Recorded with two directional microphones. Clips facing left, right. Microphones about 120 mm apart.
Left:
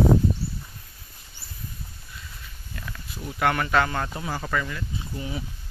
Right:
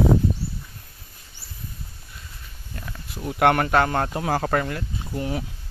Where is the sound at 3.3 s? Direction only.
55° right (ahead or behind).